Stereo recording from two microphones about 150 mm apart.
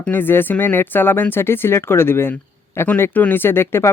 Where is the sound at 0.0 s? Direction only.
15° left (ahead or behind).